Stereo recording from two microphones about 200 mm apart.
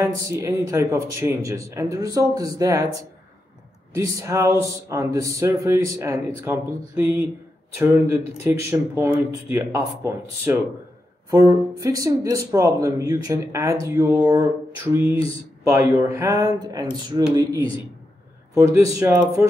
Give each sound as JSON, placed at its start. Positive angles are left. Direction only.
{"t": 0.0, "sound": "speech", "side_deg": -15}
{"t": 3.9, "sound": "speech", "side_deg": -15}
{"t": 18.9, "sound": "speech", "side_deg": -5}